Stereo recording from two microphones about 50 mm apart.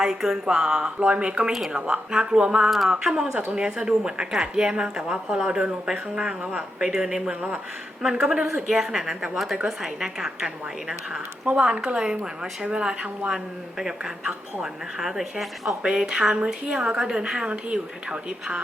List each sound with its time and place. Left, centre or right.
0.0 s a woman's voice: centre
2.6 s speech: centre
2.9 s a woman's voice: centre; by 6.7 s right
6.7 s a woman's voice: centre
15.8 s a woman's voice: centre